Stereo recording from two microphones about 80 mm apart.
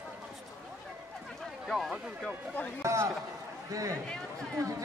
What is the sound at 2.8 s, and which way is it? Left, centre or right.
A man's voice, right.